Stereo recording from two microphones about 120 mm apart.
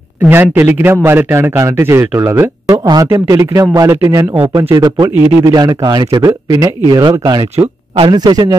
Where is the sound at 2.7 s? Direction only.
35° right (ahead or behind).